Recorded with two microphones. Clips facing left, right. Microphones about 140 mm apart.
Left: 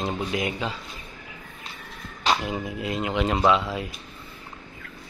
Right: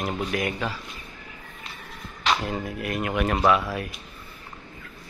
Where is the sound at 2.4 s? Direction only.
15° left (ahead or behind).